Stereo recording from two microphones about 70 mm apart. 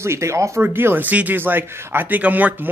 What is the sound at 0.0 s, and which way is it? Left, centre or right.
Speech, right.